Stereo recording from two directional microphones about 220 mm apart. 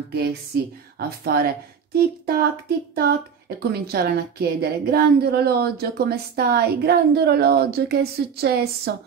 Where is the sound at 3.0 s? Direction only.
45° right (ahead or behind).